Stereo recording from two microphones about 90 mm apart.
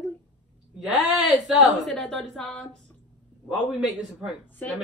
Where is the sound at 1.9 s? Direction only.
5° left (ahead or behind).